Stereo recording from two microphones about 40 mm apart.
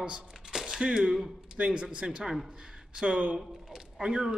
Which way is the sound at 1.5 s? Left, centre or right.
Right.